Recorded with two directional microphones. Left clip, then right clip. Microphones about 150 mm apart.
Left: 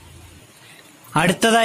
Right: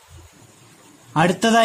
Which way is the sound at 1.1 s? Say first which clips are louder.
Left 1 dB; 20° left (ahead or behind).